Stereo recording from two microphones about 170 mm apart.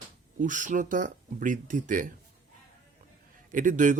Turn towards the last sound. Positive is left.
turn(degrees=-50)  # may be behind; listen again after turning